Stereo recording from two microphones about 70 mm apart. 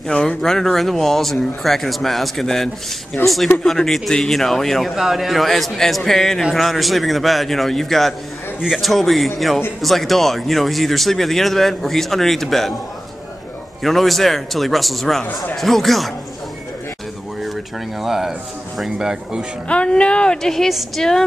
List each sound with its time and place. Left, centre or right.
0.1 s speech: centre
3.2 s speech: left
3.6 s speech: centre
13.8 s speech: centre
18.0 s speech: centre
19.7 s speech: centre